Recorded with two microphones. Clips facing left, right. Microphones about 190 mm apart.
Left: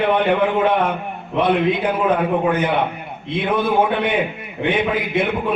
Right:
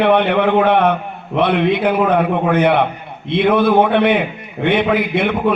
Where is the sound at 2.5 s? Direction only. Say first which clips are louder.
Right 5 dB; 65° right (ahead or behind).